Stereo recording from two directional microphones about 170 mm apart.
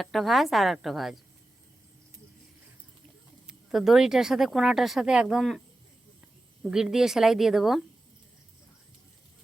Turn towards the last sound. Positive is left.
turn(degrees=0)  # may be behind; listen again after turning